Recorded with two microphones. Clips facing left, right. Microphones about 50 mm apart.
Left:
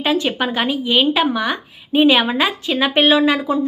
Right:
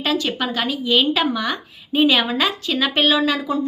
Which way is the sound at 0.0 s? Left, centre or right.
Left.